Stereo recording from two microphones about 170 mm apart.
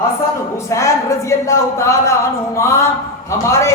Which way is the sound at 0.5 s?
15° left (ahead or behind).